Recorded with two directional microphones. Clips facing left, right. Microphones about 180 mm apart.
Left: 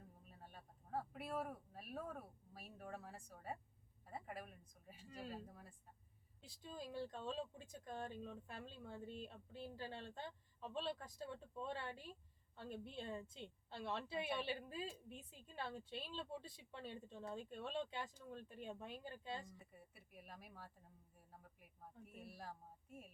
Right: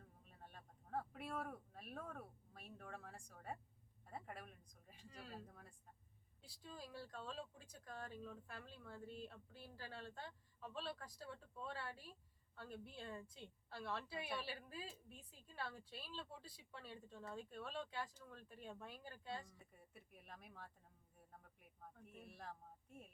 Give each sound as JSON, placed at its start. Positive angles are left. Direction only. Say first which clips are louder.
{"t": 0.3, "sound": "speech", "louder": "right 1 dB", "side_deg": 5}
{"t": 6.4, "sound": "speech", "louder": "left 4 dB", "side_deg": 20}
{"t": 19.5, "sound": "speech", "louder": "left 2 dB", "side_deg": 5}